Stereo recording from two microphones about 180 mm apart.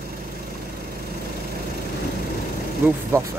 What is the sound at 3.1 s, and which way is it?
Speech, 15° right (ahead or behind).